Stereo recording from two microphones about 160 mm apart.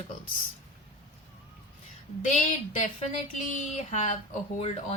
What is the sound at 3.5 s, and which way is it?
Speech, 50° left (ahead or behind).